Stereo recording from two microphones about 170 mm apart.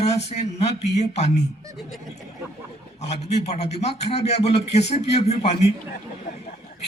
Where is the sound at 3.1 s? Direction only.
40° left (ahead or behind).